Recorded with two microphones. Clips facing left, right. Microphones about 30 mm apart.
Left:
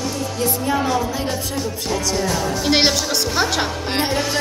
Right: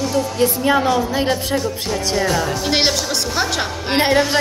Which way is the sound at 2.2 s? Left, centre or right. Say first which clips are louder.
Right 3 dB; centre.